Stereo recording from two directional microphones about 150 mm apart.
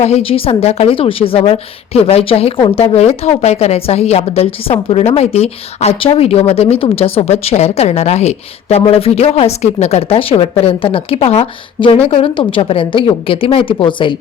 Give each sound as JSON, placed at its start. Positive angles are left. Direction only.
{"t": 0.0, "sound": "a woman's voice", "side_deg": 40}